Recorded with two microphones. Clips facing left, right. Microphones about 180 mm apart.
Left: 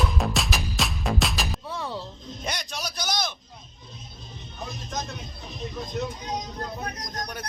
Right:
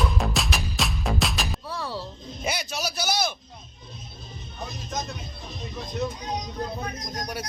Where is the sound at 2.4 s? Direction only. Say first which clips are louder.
Right 4 dB; 5° right (ahead or behind).